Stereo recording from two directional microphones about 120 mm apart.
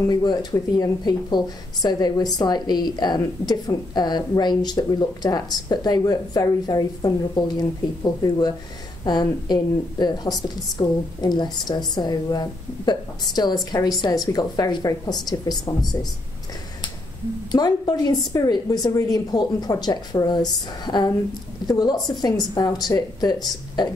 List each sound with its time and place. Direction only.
0.1 s speech: 35° left (ahead or behind)
17.5 s speech: 35° left (ahead or behind)